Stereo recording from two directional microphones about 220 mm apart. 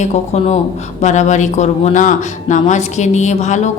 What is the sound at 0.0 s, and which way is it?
A woman's voice, 30° left (ahead or behind).